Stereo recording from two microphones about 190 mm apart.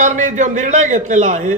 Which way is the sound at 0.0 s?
40° right (ahead or behind).